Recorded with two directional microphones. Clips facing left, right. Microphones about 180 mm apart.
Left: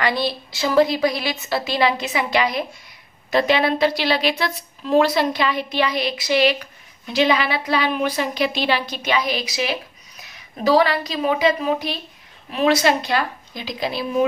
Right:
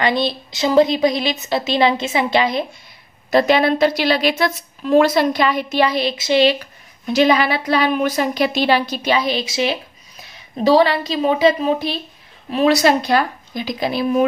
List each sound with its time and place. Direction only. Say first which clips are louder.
0.0 s a woman's voice: right 3 dB; 20° right (ahead or behind)
3.3 s a woman's voice: right 4 dB; 40° right (ahead or behind)
7.1 s a woman's voice: right 4 dB; 40° right (ahead or behind)